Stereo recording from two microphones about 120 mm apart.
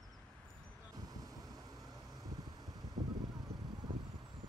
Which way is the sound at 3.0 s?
70° right (ahead or behind).